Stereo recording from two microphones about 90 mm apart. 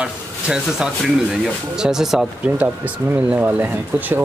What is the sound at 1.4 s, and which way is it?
Speech, 5° right (ahead or behind).